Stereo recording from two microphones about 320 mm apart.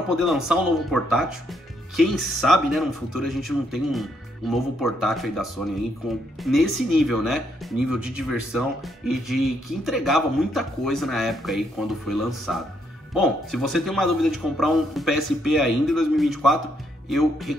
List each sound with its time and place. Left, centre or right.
0.1 s speech: centre